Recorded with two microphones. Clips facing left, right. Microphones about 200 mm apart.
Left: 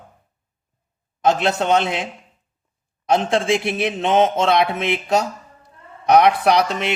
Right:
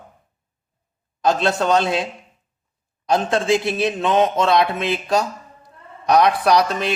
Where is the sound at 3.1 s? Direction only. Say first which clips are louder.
Even; 25° left (ahead or behind).